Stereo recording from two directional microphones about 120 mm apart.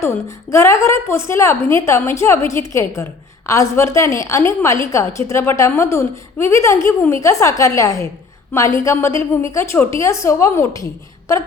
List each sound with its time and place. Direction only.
0.5 s a woman's voice: 25° left (ahead or behind)